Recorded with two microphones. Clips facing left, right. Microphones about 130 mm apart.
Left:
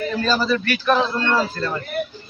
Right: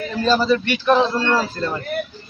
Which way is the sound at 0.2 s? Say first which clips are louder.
Right 5 dB; 20° right (ahead or behind).